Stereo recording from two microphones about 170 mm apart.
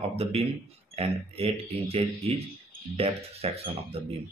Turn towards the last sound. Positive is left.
turn(degrees=-35)  # may be behind; listen again after turning